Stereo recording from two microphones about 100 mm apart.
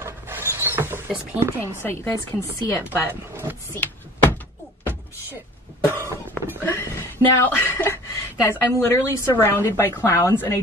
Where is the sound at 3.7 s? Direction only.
20° left (ahead or behind).